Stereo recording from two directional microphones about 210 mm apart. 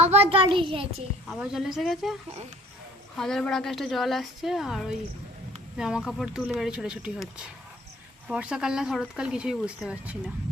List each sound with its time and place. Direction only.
0.0 s a child's voice: 30° right (ahead or behind)
1.3 s speech: centre (ahead or behind)
3.2 s speech: centre (ahead or behind)
8.3 s speech: 5° right (ahead or behind)